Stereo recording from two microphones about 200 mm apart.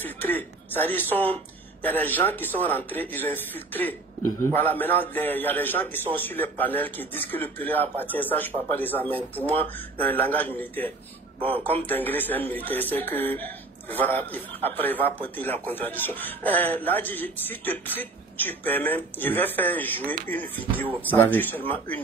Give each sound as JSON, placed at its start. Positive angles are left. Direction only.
{"t": 0.0, "sound": "a man's voice", "side_deg": 10}
{"t": 11.3, "sound": "speech", "side_deg": -25}
{"t": 11.6, "sound": "a man's voice", "side_deg": 10}